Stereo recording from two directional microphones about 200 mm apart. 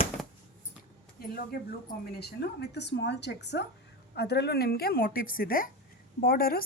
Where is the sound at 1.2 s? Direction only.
50° left (ahead or behind).